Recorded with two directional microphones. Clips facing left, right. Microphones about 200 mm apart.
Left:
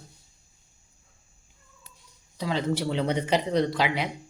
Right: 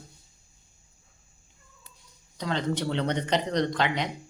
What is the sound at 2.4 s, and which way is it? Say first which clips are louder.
Speech: left 1 dB; 5° left (ahead or behind).